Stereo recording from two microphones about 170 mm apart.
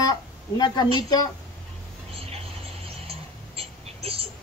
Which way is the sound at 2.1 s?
35° right (ahead or behind).